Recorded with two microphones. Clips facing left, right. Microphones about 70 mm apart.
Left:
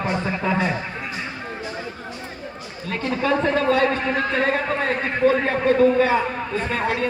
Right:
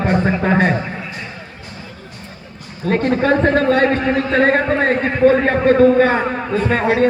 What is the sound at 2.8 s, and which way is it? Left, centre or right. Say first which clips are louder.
A man's voice: right 8 dB; right.